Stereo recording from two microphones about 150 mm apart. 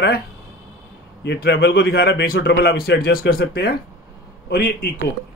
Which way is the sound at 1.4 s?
90° left.